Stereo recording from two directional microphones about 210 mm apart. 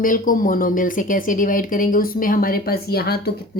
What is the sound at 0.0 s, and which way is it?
A woman's voice, 40° left (ahead or behind).